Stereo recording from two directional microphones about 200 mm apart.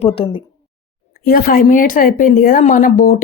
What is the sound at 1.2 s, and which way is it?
Speech, 45° left (ahead or behind).